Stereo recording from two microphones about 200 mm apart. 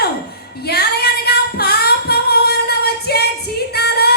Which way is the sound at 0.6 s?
50° left (ahead or behind).